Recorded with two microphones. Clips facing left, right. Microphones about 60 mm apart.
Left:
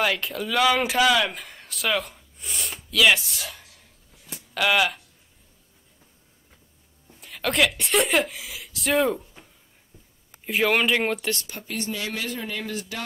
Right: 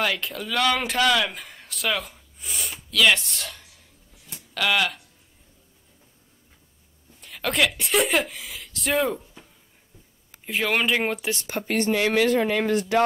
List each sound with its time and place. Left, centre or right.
0.0 s speech: centre
4.3 s a sound: centre
7.2 s speech: centre
11.4 s speech: right